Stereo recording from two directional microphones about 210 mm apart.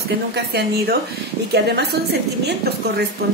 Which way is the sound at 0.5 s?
50° right (ahead or behind).